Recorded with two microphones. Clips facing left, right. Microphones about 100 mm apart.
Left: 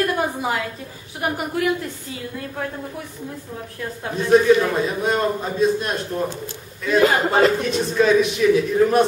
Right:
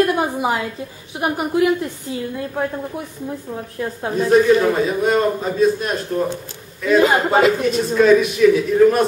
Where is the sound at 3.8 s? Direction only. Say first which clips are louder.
Right 5 dB; 25° right (ahead or behind).